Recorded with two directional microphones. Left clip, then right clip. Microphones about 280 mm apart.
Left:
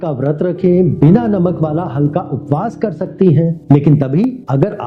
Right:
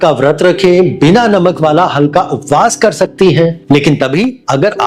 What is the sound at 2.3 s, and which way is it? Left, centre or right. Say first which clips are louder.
Speech: right 9 dB; right.